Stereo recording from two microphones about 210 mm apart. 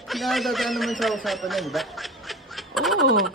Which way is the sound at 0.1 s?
Centre (ahead or behind).